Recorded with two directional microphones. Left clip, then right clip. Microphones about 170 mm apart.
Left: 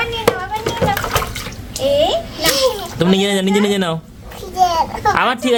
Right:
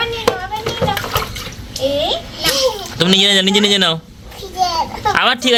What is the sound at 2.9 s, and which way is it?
Speech, 5° left (ahead or behind).